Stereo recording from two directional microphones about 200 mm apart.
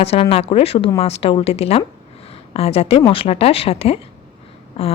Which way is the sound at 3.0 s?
25° left (ahead or behind).